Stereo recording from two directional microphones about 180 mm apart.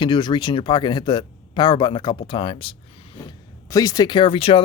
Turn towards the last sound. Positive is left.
turn(degrees=30)  # may be behind; listen again after turning